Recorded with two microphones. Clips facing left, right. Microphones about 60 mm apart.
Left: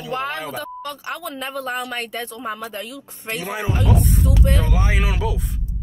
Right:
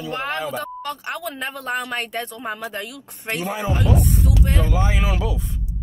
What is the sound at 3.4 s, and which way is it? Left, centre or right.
Speech, centre.